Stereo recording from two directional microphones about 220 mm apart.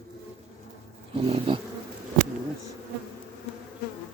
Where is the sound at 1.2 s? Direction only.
25° right (ahead or behind).